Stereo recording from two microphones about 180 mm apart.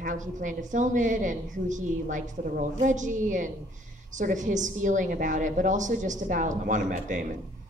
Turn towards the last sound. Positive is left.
turn(degrees=-45)  # may be behind; listen again after turning